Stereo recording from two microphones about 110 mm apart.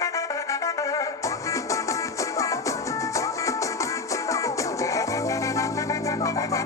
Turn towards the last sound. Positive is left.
turn(degrees=30)  # may be behind; listen again after turning